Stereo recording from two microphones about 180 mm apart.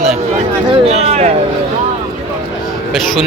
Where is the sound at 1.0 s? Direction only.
40° right (ahead or behind).